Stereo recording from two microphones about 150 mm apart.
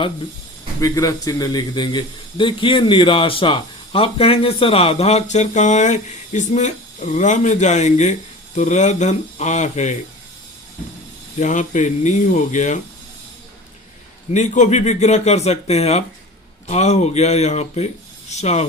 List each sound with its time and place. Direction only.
0.8 s a man's voice: 20° left (ahead or behind); by 10.0 s 50° left (ahead or behind)
11.3 s speech: 50° left (ahead or behind)
14.3 s speech: 55° left (ahead or behind)